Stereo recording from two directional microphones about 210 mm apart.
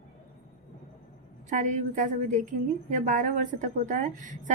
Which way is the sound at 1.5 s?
35° right (ahead or behind).